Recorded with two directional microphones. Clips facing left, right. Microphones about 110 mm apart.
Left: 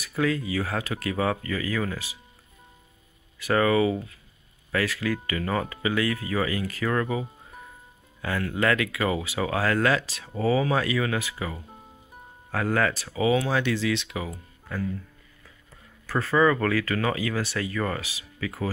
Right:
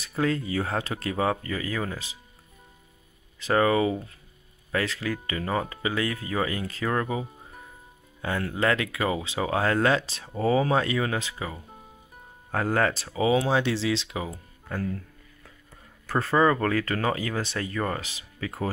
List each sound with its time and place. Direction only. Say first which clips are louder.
0.0 s speech: left 1 dB; 30° right (ahead or behind)
3.3 s speech: even; 20° right (ahead or behind)
16.1 s speech: even; 30° right (ahead or behind)